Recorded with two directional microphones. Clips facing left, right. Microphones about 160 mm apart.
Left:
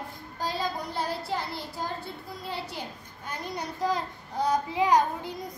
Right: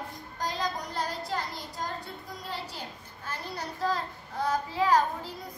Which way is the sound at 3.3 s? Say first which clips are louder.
Left 2 dB; 15° left (ahead or behind).